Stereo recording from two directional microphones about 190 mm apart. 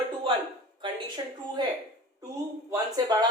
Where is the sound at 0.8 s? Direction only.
25° right (ahead or behind).